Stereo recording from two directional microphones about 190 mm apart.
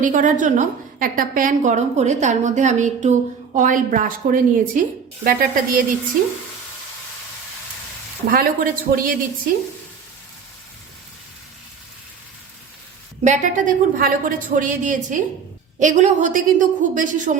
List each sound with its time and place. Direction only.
0.0 s a woman's voice: 45° right (ahead or behind)
8.3 s a woman's voice: 50° right (ahead or behind)
13.2 s a woman's voice: 40° right (ahead or behind)